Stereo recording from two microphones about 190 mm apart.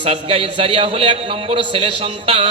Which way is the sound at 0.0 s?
30° right (ahead or behind).